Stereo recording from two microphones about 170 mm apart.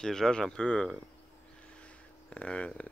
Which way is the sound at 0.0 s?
5° left (ahead or behind).